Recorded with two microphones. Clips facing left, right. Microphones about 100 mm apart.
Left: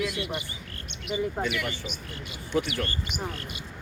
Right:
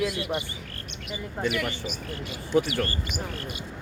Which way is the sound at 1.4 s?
35° right (ahead or behind).